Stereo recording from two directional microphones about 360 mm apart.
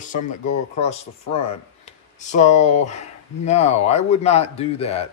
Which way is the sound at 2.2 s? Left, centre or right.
Centre.